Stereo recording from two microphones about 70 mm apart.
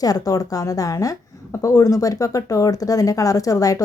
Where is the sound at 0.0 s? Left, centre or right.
Left.